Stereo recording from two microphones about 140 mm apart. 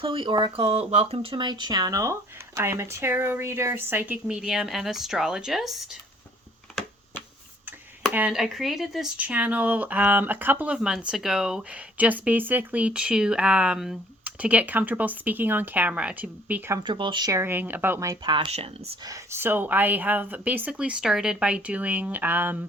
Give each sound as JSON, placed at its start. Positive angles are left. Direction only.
{"t": 0.0, "sound": "speech", "side_deg": -40}
{"t": 8.1, "sound": "speech", "side_deg": -10}
{"t": 16.8, "sound": "speech", "side_deg": -35}
{"t": 17.3, "sound": "speech", "side_deg": -15}
{"t": 18.2, "sound": "speech", "side_deg": -35}
{"t": 19.0, "sound": "speech", "side_deg": -20}